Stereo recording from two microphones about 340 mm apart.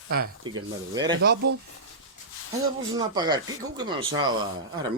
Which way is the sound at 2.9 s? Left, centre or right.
Centre.